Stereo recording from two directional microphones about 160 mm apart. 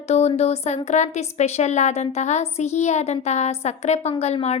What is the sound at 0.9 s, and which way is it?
A woman's voice, 45° left (ahead or behind).